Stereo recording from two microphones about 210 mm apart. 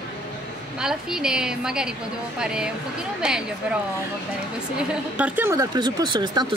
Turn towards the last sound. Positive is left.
turn(degrees=-20)  # may be behind; listen again after turning